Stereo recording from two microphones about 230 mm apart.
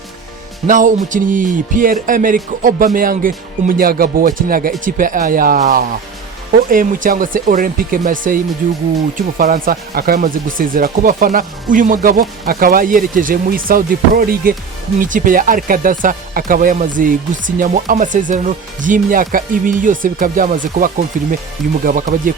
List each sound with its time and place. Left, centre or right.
0.7 s speech: right
9.4 s speech: right